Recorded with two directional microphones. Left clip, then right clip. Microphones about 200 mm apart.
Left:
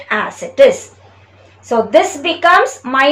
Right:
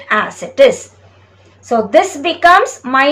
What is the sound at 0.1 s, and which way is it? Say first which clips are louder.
A woman's voice: right 3 dB; 10° right (ahead or behind).